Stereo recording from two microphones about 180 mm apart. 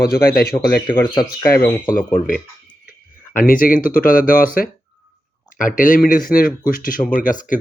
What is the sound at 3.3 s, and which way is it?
Speech, 50° left (ahead or behind).